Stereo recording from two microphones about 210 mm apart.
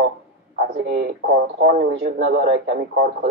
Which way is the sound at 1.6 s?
50° right (ahead or behind).